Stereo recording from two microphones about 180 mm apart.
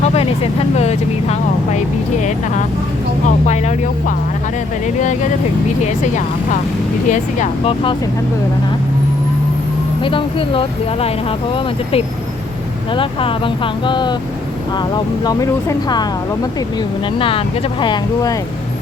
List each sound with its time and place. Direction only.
0.8 s speech: 35° left (ahead or behind)
3.2 s speech: 40° left (ahead or behind)
7.1 s speech: 35° left (ahead or behind)
10.0 s speech: 30° left (ahead or behind)